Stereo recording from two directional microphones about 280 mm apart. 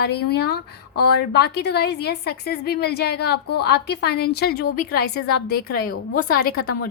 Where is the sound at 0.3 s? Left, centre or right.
Left.